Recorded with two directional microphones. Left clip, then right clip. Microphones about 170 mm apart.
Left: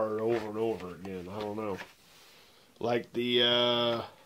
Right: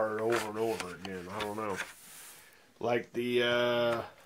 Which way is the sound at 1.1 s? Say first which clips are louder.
Even; 5° right (ahead or behind).